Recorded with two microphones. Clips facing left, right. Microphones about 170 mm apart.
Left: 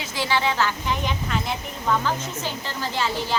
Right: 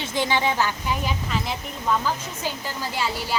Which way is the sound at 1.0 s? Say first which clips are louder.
Left 1 dB; centre (ahead or behind).